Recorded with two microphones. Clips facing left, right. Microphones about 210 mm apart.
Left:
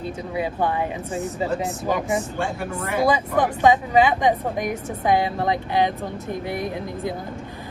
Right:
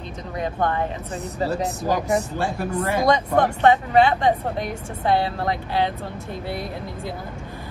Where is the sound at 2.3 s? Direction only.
35° right (ahead or behind).